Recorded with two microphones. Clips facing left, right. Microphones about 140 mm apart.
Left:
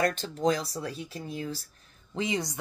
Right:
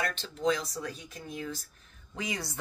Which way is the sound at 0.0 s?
40° left (ahead or behind).